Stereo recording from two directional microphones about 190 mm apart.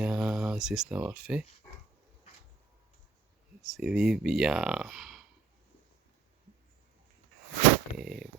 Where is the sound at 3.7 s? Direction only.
Centre (ahead or behind).